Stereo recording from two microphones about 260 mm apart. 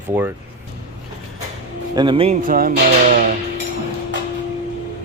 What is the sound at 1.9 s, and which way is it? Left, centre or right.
Speech, centre.